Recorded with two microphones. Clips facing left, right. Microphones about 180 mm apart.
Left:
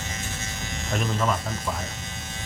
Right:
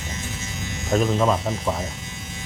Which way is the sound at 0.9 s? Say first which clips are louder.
Right 6 dB; 35° right (ahead or behind).